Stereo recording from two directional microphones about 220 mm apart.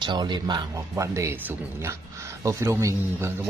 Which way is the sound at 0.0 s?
20° right (ahead or behind).